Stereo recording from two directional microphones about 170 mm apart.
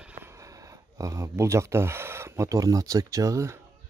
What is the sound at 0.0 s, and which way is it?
Speech, 10° right (ahead or behind).